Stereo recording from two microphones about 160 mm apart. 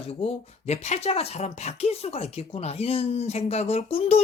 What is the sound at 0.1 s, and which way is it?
Speech, 40° left (ahead or behind).